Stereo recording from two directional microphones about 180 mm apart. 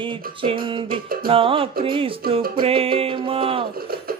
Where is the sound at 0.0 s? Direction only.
30° right (ahead or behind).